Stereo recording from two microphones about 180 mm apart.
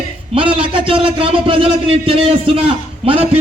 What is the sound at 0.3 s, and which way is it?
A man's voice, 30° right (ahead or behind).